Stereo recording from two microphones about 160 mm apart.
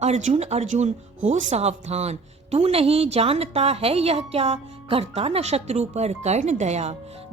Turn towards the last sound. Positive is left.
turn(degrees=-45)  # may be behind; listen again after turning